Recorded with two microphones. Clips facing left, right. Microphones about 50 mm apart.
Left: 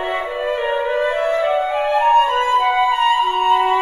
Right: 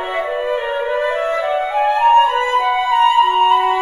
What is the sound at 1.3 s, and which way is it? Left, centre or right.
Music, right.